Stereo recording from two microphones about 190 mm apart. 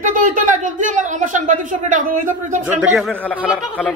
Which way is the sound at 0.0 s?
45° right (ahead or behind).